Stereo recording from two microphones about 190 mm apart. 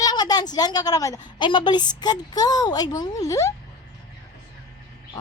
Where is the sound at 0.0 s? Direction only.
20° left (ahead or behind).